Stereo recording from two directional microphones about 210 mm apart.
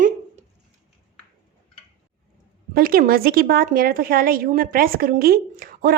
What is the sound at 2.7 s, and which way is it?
A woman's voice, 45° right (ahead or behind).